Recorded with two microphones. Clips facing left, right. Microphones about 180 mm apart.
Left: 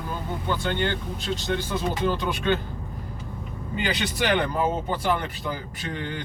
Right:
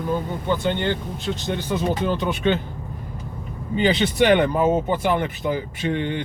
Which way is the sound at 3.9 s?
25° right (ahead or behind).